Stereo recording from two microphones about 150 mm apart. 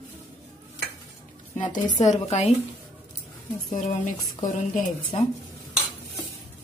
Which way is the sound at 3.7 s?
55° left (ahead or behind).